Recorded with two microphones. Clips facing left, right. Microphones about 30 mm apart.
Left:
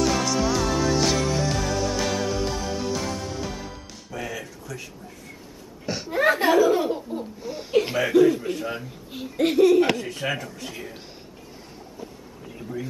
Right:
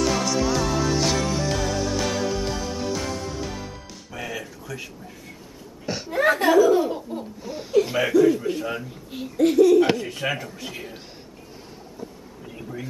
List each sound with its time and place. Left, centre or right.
0.0 s music: centre
5.9 s a sound: centre
6.5 s laughter: centre
7.0 s laughter: centre
7.4 s speech: centre
9.4 s speech: left
9.9 s speech: centre